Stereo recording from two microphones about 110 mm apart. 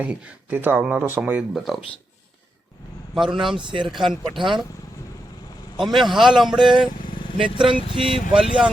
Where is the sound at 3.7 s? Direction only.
45° right (ahead or behind).